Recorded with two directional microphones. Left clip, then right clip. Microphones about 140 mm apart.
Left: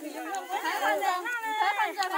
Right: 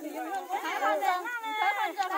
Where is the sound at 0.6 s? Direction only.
20° right (ahead or behind).